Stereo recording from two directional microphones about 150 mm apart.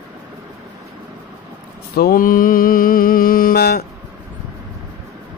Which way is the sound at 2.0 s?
80° left.